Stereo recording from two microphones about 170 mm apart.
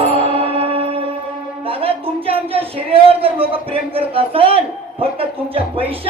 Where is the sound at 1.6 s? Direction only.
35° right (ahead or behind).